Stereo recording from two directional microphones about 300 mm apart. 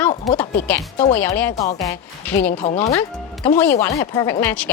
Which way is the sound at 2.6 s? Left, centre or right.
Centre.